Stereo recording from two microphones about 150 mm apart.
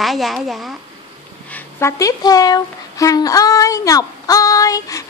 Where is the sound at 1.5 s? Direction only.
15° left (ahead or behind).